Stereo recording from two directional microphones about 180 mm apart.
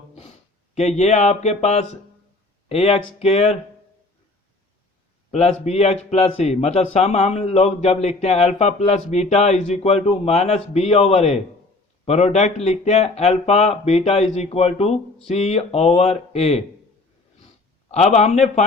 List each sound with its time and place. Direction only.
0.8 s a man's voice: 40° left (ahead or behind)
5.3 s a man's voice: 35° left (ahead or behind)
17.9 s a man's voice: 40° left (ahead or behind)